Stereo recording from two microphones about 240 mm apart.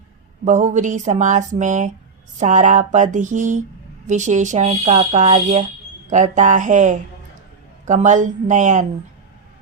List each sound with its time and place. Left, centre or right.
0.4 s speech: right